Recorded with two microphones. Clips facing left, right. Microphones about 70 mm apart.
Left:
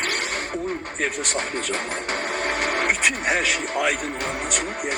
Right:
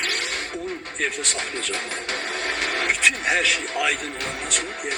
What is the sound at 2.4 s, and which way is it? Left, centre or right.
Printer, left.